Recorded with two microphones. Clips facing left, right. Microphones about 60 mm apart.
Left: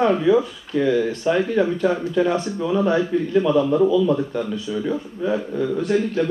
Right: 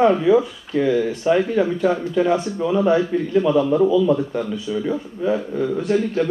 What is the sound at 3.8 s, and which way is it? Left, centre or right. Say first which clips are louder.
Speech: right 1 dB; centre.